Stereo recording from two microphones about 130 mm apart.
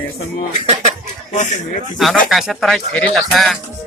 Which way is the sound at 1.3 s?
65° left (ahead or behind).